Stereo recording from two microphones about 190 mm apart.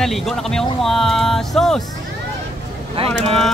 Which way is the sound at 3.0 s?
30° right (ahead or behind).